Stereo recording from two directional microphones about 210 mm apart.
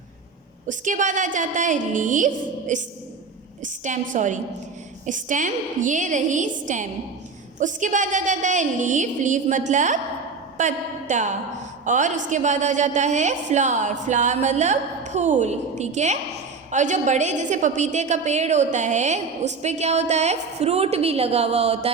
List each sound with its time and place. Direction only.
0.7 s a woman's voice: 35° right (ahead or behind)
3.8 s a woman's voice: 35° right (ahead or behind)